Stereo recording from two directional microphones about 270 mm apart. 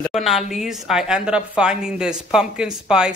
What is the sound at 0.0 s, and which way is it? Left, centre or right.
Speech, centre.